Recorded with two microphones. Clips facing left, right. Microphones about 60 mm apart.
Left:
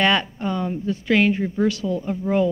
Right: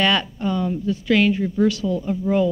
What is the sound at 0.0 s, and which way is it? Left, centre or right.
Speech, left.